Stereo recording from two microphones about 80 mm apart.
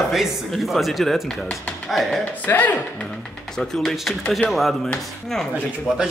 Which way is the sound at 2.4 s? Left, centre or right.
Left.